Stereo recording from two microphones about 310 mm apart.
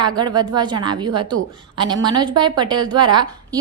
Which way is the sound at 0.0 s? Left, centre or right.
Centre.